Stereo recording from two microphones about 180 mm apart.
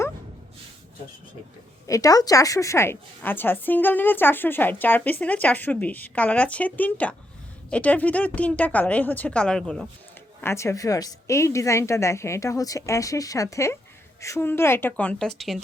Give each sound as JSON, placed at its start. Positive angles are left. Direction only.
{"t": 1.9, "sound": "a woman's voice", "side_deg": 20}
{"t": 10.4, "sound": "a woman's voice", "side_deg": 15}